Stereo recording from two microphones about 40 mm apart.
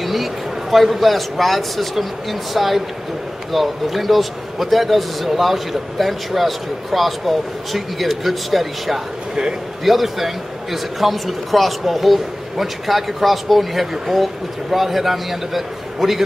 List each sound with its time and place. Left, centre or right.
0.0 s a man's voice: centre
9.3 s a man's voice: centre
9.8 s a man's voice: centre